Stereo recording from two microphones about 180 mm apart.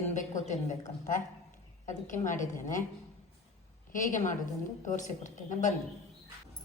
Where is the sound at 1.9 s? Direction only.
45° left (ahead or behind).